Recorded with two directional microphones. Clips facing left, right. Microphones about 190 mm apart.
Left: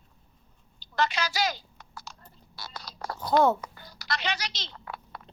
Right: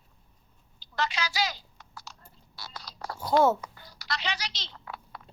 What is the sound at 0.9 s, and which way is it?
Typing, 50° left (ahead or behind).